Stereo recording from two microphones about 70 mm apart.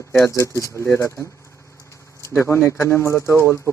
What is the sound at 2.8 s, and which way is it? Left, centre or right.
Speech, left.